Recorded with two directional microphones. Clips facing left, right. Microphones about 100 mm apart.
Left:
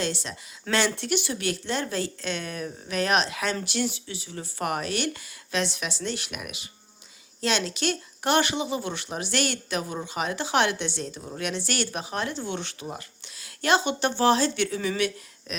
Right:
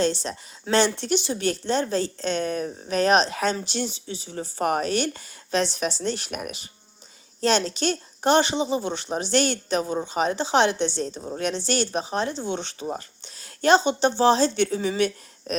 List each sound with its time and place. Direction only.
0.0 s speech: 30° right (ahead or behind)